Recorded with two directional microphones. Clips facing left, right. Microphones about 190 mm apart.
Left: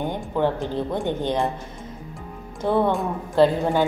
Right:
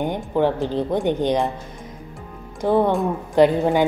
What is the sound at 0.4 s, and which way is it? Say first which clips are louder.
A woman's voice: right 3 dB; 15° right (ahead or behind).